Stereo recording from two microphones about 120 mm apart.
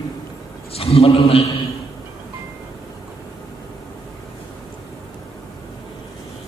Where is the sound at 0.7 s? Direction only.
55° left (ahead or behind).